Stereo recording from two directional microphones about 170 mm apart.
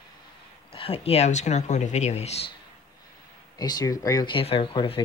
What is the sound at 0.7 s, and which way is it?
Speech, 35° left (ahead or behind).